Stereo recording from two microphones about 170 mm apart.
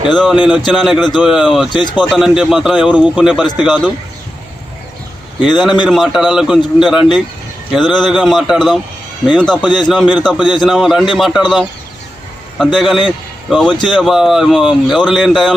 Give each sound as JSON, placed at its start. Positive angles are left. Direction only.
{"t": 0.0, "sound": "speech", "side_deg": 0}
{"t": 1.7, "sound": "speech", "side_deg": 25}
{"t": 2.0, "sound": "speech", "side_deg": 0}
{"t": 5.4, "sound": "a man's voice", "side_deg": 0}